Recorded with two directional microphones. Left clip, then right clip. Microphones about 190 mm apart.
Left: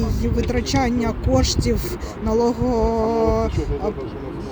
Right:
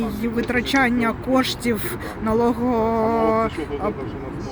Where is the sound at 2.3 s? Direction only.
25° right (ahead or behind).